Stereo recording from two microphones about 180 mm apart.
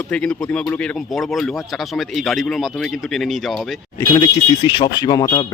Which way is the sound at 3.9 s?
20° left (ahead or behind).